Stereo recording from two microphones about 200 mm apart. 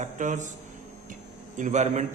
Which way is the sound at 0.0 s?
35° right (ahead or behind).